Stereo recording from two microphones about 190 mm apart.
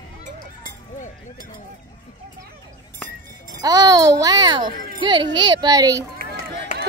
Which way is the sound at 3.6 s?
20° right (ahead or behind).